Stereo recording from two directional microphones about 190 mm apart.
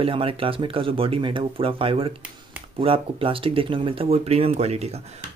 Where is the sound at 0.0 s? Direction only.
30° right (ahead or behind).